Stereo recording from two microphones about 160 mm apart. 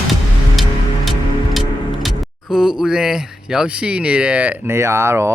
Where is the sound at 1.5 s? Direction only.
Centre (ahead or behind).